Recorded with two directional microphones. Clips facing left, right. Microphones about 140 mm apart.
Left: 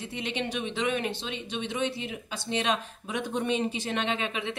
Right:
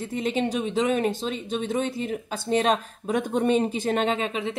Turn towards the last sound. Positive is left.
turn(degrees=-35)  # may be behind; listen again after turning